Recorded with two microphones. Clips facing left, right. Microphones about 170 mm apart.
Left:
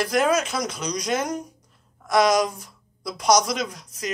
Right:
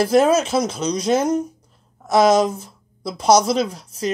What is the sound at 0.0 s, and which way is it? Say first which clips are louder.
A woman's voice: right 6 dB; 30° right (ahead or behind).